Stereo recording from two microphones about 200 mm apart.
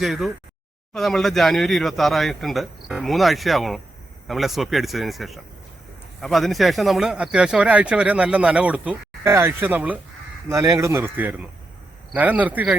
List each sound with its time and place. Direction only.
0.0 s speech: centre (ahead or behind)